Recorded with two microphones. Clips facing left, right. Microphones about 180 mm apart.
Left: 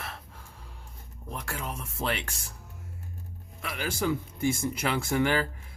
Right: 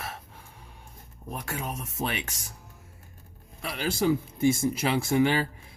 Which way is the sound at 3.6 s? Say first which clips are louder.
Right 2 dB; 35° right (ahead or behind).